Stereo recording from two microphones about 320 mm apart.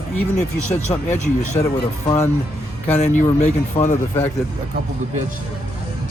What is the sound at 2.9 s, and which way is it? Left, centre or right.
Speech, left.